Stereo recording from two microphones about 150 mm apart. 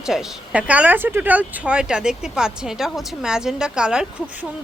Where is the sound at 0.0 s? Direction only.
5° right (ahead or behind).